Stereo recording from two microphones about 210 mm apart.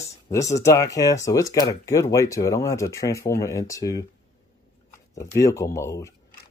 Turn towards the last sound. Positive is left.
turn(degrees=15)  # may be behind; listen again after turning